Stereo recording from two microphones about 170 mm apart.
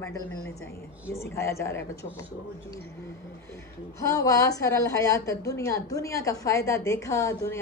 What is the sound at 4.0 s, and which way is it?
A woman's voice, 20° left (ahead or behind).